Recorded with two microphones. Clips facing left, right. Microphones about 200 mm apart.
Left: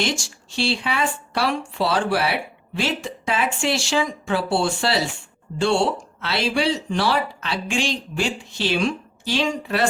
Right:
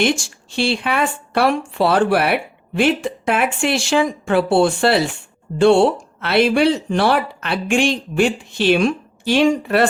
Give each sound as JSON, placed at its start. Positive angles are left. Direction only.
{"t": 0.0, "sound": "speech", "side_deg": -55}